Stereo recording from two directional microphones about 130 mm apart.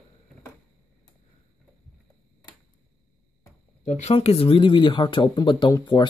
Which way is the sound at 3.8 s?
60° left (ahead or behind).